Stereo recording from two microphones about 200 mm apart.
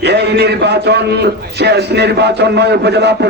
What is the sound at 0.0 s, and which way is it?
A man's voice, 55° right (ahead or behind).